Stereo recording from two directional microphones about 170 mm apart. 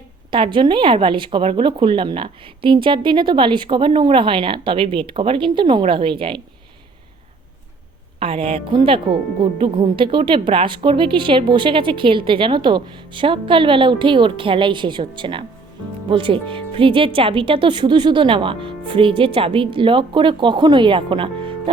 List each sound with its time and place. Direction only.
0.3 s speech: 30° right (ahead or behind)
8.2 s a woman's voice: 35° right (ahead or behind)